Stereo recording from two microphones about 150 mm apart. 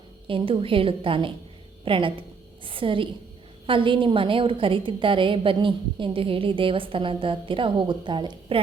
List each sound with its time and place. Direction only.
0.3 s a woman's voice: 35° right (ahead or behind)